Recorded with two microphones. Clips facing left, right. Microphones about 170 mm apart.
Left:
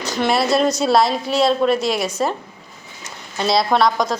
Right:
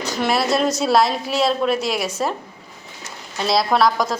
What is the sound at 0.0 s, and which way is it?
A woman's voice, centre (ahead or behind).